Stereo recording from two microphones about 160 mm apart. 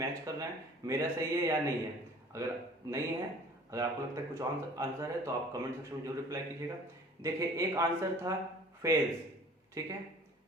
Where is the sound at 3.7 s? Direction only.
20° right (ahead or behind).